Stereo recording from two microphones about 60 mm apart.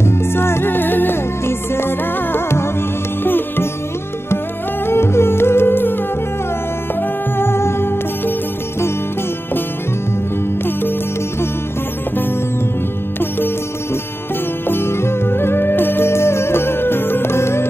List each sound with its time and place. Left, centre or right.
0.0 s music: left
4.8 s music: left
7.0 s music: left
10.6 s music: left
14.7 s music: left